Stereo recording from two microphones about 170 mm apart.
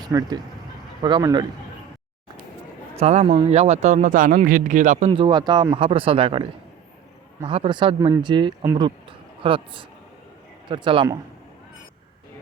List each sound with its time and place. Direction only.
0.0 s a man's voice: 20° right (ahead or behind)
3.0 s a man's voice: 40° right (ahead or behind)